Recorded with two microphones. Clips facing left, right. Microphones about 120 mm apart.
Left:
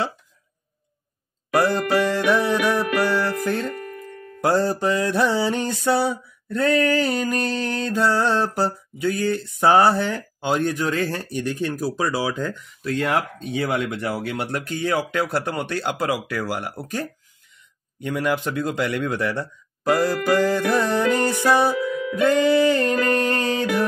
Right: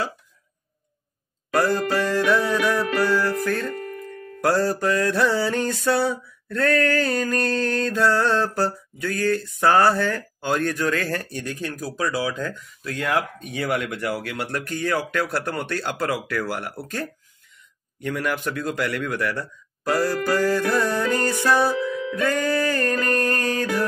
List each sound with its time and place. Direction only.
1.5 s music: 15° left (ahead or behind)
4.4 s mantra: 20° left (ahead or behind)
17.9 s speech: 20° left (ahead or behind)
20.2 s mantra: 15° left (ahead or behind)
22.1 s music: 20° left (ahead or behind)